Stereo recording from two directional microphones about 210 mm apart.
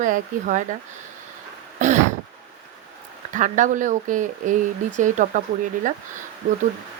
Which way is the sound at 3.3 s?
35° right (ahead or behind).